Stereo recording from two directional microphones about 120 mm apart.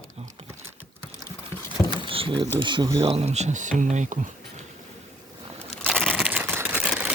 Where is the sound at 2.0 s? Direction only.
45° right (ahead or behind).